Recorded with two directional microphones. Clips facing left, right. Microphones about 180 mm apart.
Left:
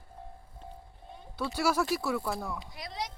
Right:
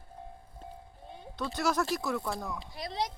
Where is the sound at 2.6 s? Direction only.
30° right (ahead or behind).